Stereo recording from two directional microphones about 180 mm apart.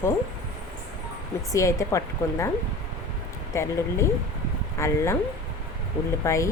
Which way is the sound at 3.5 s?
15° left (ahead or behind).